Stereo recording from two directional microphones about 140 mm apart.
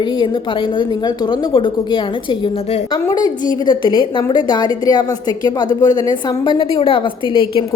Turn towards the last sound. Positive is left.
turn(degrees=40)  # may be behind; listen again after turning